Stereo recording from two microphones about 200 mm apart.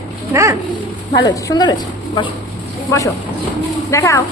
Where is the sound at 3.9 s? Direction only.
15° left (ahead or behind).